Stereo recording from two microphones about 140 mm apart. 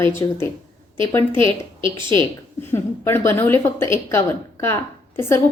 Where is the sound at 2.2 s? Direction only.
15° left (ahead or behind).